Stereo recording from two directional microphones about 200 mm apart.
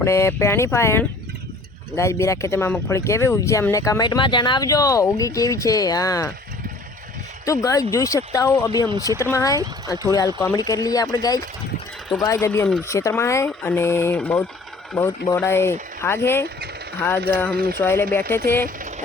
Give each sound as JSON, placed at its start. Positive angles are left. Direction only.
{"t": 0.0, "sound": "speech", "side_deg": 15}
{"t": 7.4, "sound": "speech", "side_deg": 15}
{"t": 17.5, "sound": "speech", "side_deg": -50}
{"t": 17.7, "sound": "speech", "side_deg": 10}